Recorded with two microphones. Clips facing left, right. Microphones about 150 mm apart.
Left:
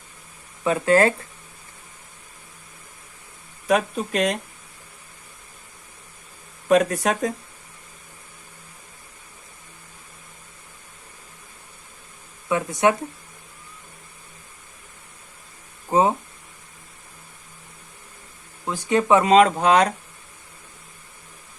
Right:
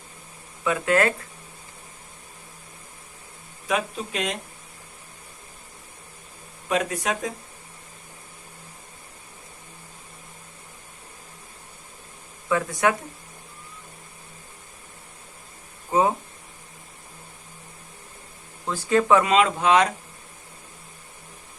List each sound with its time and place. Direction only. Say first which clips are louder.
0.6 s speech: left 4 dB; 30° left (ahead or behind)
3.7 s speech: left 5 dB; 45° left (ahead or behind)
6.7 s speech: left 7 dB; 45° left (ahead or behind)
12.5 s speech: left 2 dB; 20° left (ahead or behind)
15.9 s speech: left 2 dB; 25° left (ahead or behind)
18.6 s speech: even; 15° left (ahead or behind)
19.2 s speech: left 5 dB; 40° left (ahead or behind)